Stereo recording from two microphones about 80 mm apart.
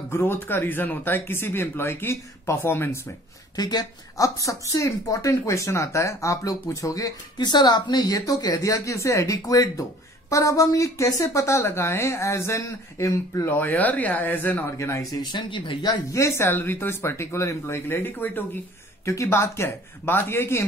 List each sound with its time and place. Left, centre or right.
0.1 s speech: left
3.5 s speech: left
7.3 s speech: left
13.5 s speech: left
14.8 s speech: left
15.3 s speech: left
16.1 s speech: left
19.0 s speech: left